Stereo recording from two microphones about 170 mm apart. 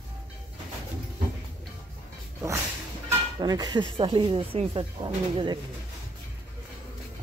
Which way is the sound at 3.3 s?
25° right (ahead or behind).